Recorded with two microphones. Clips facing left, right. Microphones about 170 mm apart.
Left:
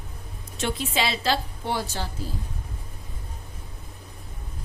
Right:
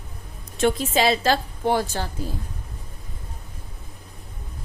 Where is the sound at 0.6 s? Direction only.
45° right (ahead or behind).